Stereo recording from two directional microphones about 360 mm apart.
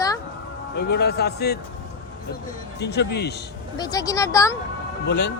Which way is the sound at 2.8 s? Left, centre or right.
Left.